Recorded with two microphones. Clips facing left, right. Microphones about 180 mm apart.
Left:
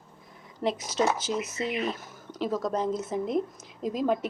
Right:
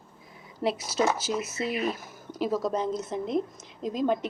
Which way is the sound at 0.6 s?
10° right (ahead or behind).